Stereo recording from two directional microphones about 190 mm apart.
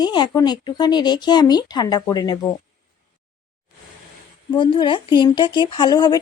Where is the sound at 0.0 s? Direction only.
20° left (ahead or behind).